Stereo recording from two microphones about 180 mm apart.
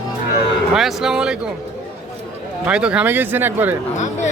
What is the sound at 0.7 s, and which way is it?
Speech, centre (ahead or behind).